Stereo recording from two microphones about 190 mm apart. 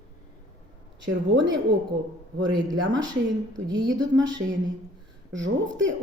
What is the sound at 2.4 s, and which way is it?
Speech, 20° right (ahead or behind).